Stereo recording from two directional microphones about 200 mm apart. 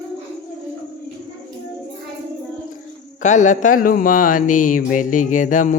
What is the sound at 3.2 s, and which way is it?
Speech, 35° left (ahead or behind).